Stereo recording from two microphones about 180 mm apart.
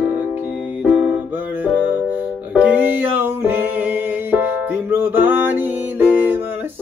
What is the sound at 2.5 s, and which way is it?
Music, 10° right (ahead or behind).